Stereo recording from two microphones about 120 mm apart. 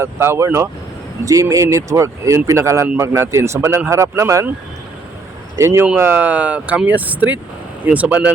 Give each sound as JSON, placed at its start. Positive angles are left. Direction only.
{"t": 0.0, "sound": "speech", "side_deg": -20}
{"t": 5.5, "sound": "speech", "side_deg": -20}